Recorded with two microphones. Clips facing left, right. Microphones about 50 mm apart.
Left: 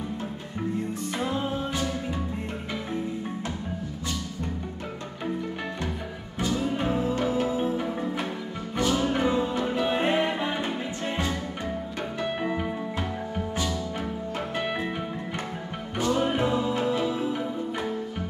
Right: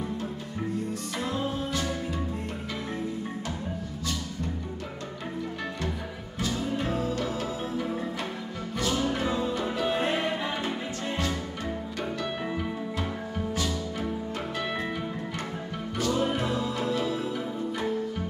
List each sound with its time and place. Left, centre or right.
1.2 s music: left
6.4 s music: centre
16.0 s music: left